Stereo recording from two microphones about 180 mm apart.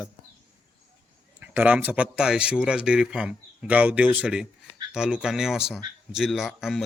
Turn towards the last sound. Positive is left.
turn(degrees=0)  # may be behind; listen again after turning